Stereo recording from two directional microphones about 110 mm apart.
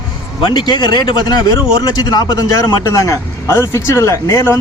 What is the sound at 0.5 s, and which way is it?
Speech, 40° left (ahead or behind).